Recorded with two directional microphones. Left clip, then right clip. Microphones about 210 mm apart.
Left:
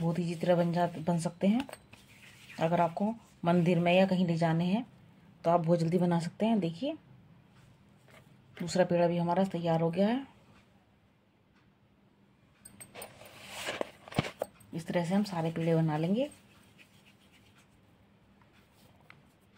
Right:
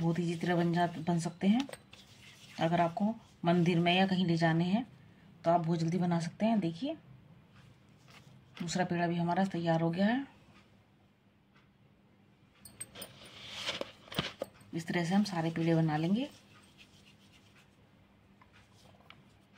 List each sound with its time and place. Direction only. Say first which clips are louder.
0.0 s speech: left 2 dB; 35° left (ahead or behind)
2.6 s a woman's voice: left 2 dB; 45° left (ahead or behind)
8.6 s speech: left 6 dB; 40° left (ahead or behind)
14.7 s speech: left 1 dB; 35° left (ahead or behind)